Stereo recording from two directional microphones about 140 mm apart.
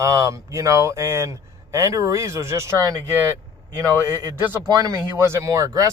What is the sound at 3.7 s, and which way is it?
A man's voice, 20° right (ahead or behind).